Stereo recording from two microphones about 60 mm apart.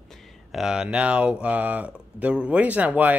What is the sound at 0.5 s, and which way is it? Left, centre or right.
Speech, centre.